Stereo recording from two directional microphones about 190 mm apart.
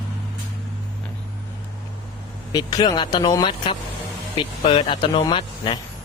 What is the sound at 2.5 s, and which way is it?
Speech, 20° left (ahead or behind).